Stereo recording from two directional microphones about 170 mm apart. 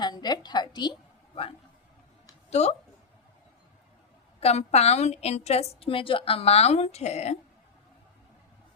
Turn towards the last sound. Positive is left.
turn(degrees=40)  # may be behind; listen again after turning